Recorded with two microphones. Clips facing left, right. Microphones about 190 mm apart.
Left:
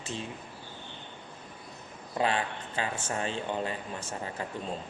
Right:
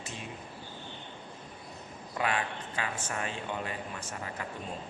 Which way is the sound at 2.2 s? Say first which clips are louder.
Left 3 dB; 30° left (ahead or behind).